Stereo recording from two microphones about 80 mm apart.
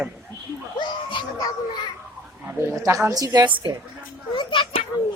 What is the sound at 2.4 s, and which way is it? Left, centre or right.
A woman's voice, right.